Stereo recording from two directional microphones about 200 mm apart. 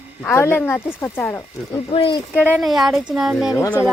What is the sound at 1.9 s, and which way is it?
Speech, 25° left (ahead or behind).